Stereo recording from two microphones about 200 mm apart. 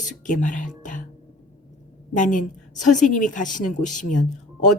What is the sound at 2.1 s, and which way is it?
Speech, 40° left (ahead or behind).